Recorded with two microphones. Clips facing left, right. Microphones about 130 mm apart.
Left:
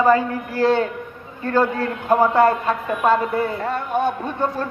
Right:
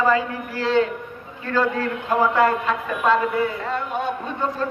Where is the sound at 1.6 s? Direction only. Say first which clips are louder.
Left 2 dB; 30° left (ahead or behind).